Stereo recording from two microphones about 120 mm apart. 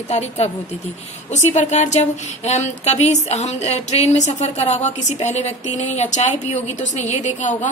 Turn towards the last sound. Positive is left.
turn(degrees=85)